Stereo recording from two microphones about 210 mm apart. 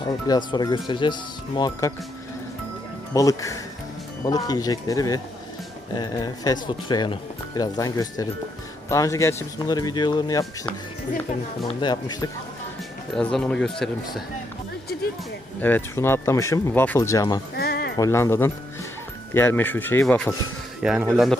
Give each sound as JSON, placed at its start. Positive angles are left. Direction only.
{"t": 0.3, "sound": "speech", "side_deg": 20}
{"t": 3.1, "sound": "speech", "side_deg": 15}
{"t": 11.7, "sound": "speech", "side_deg": 20}
{"t": 13.1, "sound": "speech", "side_deg": 5}
{"t": 15.6, "sound": "speech", "side_deg": 10}
{"t": 17.5, "sound": "a sound", "side_deg": 45}
{"t": 17.9, "sound": "speech", "side_deg": 15}
{"t": 20.8, "sound": "speech", "side_deg": -5}